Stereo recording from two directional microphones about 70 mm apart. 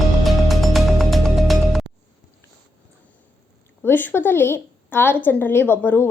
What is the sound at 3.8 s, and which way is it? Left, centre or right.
A woman's voice, left.